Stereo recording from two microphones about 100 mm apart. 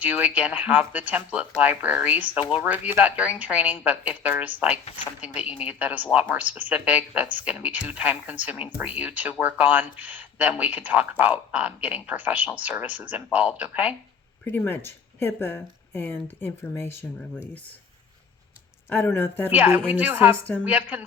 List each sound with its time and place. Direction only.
0.0 s speech: 15° right (ahead or behind)
14.4 s speech: 20° left (ahead or behind)
18.9 s speech: 20° left (ahead or behind)
19.5 s speech: 15° right (ahead or behind)